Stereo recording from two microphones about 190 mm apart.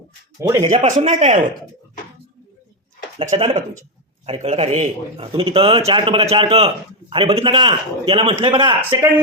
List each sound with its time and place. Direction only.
0.3 s a man's voice: 15° right (ahead or behind)
0.6 s a man's voice: 35° right (ahead or behind)
3.2 s a man's voice: 30° right (ahead or behind)
8.9 s speech: 10° right (ahead or behind)